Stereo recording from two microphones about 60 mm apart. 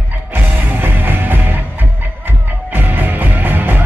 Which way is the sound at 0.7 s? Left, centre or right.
Right.